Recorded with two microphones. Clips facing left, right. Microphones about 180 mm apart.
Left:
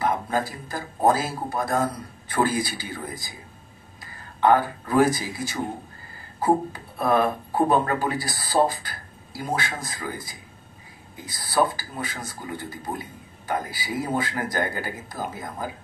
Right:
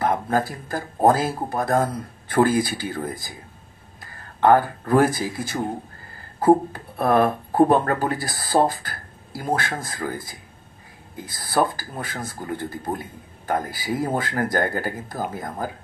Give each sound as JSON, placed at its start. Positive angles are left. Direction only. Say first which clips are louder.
{"t": 0.0, "sound": "a man's voice", "louder": "right 3 dB", "side_deg": -50}